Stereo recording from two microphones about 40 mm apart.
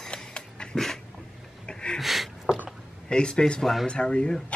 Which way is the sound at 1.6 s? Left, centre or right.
Centre.